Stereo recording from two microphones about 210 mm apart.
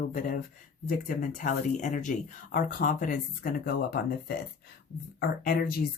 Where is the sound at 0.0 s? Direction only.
40° left (ahead or behind).